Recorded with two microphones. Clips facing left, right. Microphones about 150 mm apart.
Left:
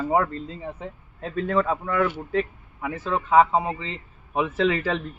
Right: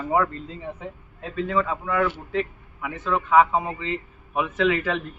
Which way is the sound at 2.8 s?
35° left (ahead or behind).